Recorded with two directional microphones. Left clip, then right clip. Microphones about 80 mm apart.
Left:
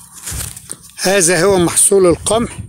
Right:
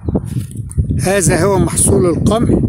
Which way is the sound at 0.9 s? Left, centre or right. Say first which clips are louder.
Left 1 dB; right.